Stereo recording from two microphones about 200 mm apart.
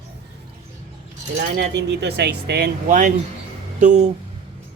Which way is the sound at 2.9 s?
40° right (ahead or behind).